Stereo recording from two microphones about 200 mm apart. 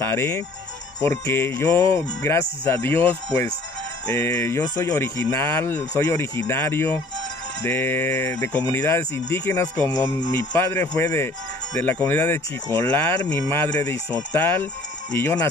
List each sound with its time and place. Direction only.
0.0 s speech: 15° left (ahead or behind)